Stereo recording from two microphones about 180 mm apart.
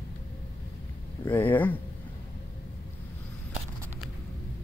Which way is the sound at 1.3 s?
10° left (ahead or behind).